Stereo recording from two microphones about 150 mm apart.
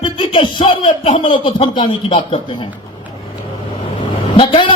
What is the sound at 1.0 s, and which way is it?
Speech, 45° left (ahead or behind).